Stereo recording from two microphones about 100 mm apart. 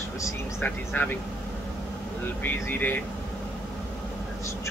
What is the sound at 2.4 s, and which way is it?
Speech, 20° left (ahead or behind).